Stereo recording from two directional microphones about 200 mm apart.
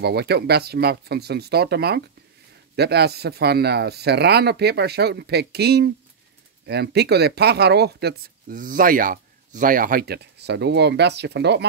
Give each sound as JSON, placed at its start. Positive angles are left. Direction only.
{"t": 0.0, "sound": "speech", "side_deg": -55}